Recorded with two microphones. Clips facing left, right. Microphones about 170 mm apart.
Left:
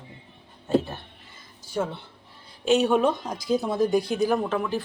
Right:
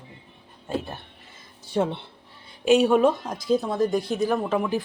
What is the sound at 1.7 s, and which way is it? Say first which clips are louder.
Speech: right 4 dB; 30° right (ahead or behind).